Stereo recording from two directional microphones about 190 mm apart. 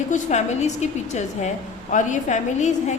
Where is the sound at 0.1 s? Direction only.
35° left (ahead or behind).